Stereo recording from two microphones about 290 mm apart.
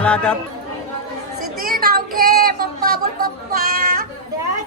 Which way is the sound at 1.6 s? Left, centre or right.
Right.